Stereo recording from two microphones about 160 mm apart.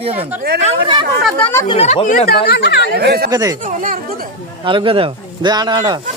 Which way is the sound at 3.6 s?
55° right (ahead or behind).